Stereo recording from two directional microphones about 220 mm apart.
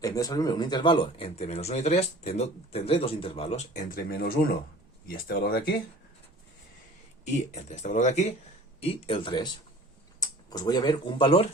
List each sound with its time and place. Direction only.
0.0 s speech: 15° left (ahead or behind); by 5.7 s 45° left (ahead or behind)
7.5 s speech: 30° left (ahead or behind)